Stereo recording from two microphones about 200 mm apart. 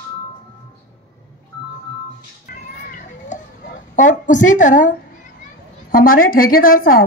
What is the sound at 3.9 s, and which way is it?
A woman's voice, 40° left (ahead or behind).